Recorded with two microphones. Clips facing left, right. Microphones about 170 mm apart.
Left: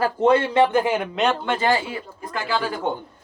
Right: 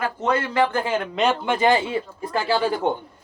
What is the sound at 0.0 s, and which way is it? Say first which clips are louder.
Speech: left 5 dB; 30° left (ahead or behind).